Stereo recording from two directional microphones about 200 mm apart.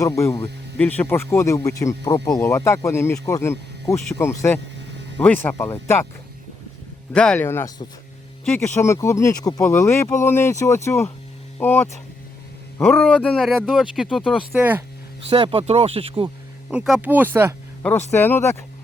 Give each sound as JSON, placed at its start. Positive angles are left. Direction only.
{"t": 0.0, "sound": "speech", "side_deg": 15}
{"t": 7.1, "sound": "a man's voice", "side_deg": 5}
{"t": 15.3, "sound": "speech", "side_deg": -25}
{"t": 16.6, "sound": "speech", "side_deg": 0}
{"t": 18.1, "sound": "speech", "side_deg": 10}